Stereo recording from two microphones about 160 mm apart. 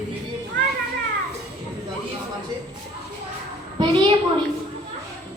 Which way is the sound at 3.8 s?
30° right (ahead or behind).